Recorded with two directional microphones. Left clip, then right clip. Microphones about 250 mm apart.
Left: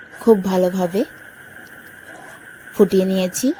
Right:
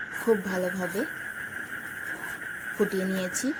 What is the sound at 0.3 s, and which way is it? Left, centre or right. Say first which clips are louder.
Speech: left 11 dB; left.